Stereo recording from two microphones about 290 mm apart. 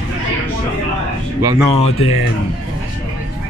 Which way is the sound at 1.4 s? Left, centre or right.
Centre.